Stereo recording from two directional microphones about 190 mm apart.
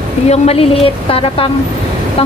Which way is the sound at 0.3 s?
30° left (ahead or behind).